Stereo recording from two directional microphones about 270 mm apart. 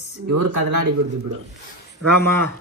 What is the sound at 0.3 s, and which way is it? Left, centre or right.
Speech, right.